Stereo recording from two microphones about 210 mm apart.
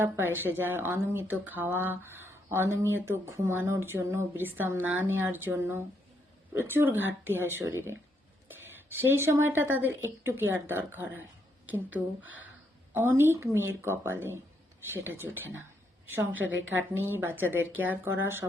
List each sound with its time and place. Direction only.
0.0 s a woman's voice: 10° right (ahead or behind)
16.4 s a woman's voice: 65° right (ahead or behind)
17.2 s speech: 10° right (ahead or behind)